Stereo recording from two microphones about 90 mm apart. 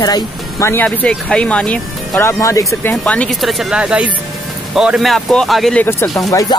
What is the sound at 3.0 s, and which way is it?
Speech, 10° left (ahead or behind).